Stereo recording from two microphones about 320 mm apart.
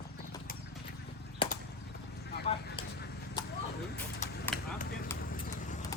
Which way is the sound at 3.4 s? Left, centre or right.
Centre.